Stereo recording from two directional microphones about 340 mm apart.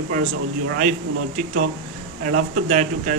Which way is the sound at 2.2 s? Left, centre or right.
Right.